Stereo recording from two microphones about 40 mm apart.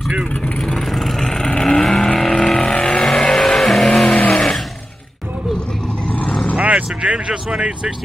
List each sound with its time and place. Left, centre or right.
0.6 s vehicle: centre
3.1 s vehicle: centre
4.1 s vehicle: left
6.0 s vehicle: left
6.6 s speech: right